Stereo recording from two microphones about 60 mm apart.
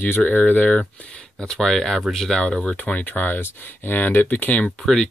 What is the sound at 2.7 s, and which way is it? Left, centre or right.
Speech, left.